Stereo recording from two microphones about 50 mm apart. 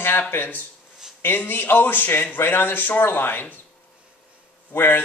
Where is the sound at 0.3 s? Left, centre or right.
Left.